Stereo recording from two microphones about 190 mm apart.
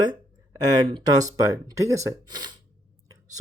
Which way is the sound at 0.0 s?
25° right (ahead or behind).